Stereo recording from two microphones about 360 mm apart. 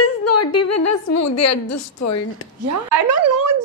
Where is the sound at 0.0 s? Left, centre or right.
Left.